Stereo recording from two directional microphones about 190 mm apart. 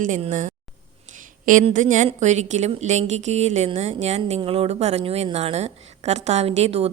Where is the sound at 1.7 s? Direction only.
40° right (ahead or behind).